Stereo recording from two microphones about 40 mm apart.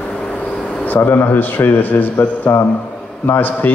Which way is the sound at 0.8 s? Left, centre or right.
Left.